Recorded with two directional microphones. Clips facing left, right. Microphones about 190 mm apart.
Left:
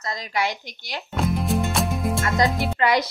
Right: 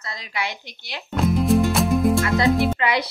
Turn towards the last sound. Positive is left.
turn(degrees=40)  # may be behind; listen again after turning